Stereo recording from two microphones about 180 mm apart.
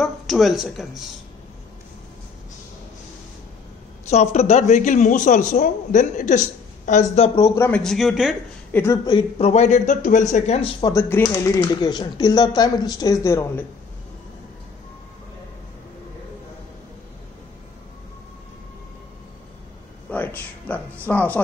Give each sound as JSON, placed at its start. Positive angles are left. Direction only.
{"t": 0.0, "sound": "speech", "side_deg": 0}
{"t": 4.1, "sound": "a man's voice", "side_deg": 40}
{"t": 7.3, "sound": "speech", "side_deg": 15}
{"t": 7.8, "sound": "speech", "side_deg": 0}
{"t": 8.7, "sound": "speech", "side_deg": 15}
{"t": 9.4, "sound": "speech", "side_deg": 40}
{"t": 10.8, "sound": "speech", "side_deg": 15}
{"t": 20.1, "sound": "a sound", "side_deg": 10}
{"t": 21.1, "sound": "speech", "side_deg": 10}